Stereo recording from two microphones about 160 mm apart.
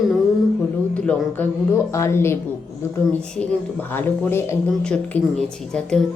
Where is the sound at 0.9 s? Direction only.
10° left (ahead or behind).